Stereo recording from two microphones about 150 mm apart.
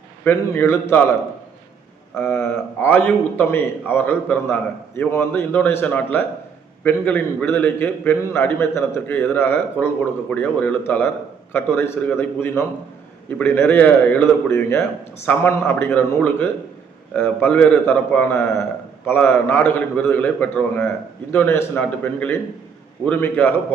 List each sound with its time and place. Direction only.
0.3 s a man's voice: 15° left (ahead or behind)
2.1 s a man's voice: 15° left (ahead or behind)